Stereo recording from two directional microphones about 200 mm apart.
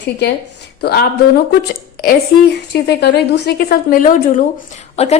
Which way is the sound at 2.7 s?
55° left (ahead or behind).